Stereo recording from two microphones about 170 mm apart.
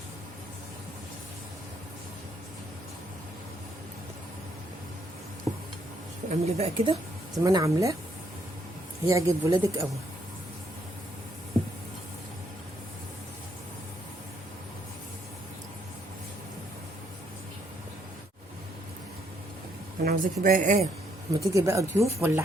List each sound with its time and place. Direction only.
6.2 s speech: 40° right (ahead or behind)
7.3 s speech: 20° right (ahead or behind)
9.0 s speech: 20° right (ahead or behind)
20.1 s speech: 50° right (ahead or behind)
21.4 s speech: 20° right (ahead or behind)